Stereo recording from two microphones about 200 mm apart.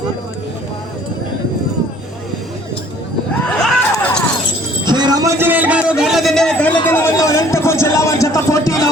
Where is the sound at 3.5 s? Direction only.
5° left (ahead or behind).